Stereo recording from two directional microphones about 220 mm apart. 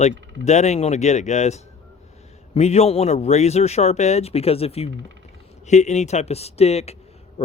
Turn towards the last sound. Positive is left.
turn(degrees=30)  # may be behind; listen again after turning